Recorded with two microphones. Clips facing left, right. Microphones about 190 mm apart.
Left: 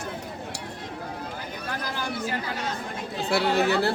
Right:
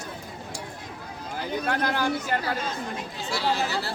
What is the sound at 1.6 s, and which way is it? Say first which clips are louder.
Chatter: right 6 dB; 65° right (ahead or behind).